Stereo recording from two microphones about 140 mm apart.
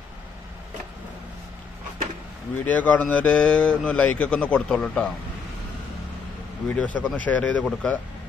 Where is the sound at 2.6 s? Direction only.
10° left (ahead or behind).